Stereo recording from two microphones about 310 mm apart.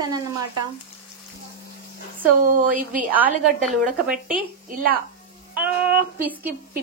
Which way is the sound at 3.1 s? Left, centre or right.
Centre.